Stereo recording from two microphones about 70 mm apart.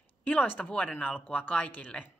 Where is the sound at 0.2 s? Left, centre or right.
Left.